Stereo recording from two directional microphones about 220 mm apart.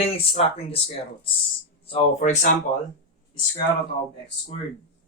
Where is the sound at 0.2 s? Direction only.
25° left (ahead or behind).